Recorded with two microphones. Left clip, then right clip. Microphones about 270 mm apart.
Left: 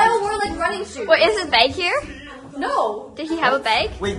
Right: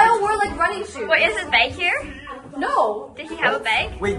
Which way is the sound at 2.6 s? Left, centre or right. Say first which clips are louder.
Right 1 dB; centre.